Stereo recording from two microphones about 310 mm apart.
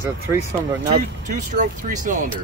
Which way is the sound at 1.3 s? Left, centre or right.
Right.